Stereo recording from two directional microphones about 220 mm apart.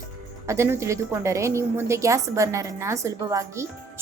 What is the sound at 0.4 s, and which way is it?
A woman's voice, 10° right (ahead or behind).